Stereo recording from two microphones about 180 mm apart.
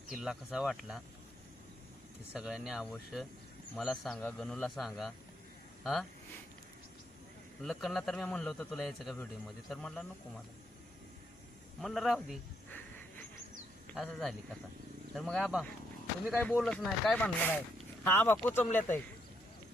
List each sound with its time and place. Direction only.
0.1 s a man's voice: centre (ahead or behind)
2.3 s a man's voice: 5° right (ahead or behind)
7.6 s a man's voice: centre (ahead or behind)
11.8 s a man's voice: centre (ahead or behind)
13.9 s a man's voice: centre (ahead or behind)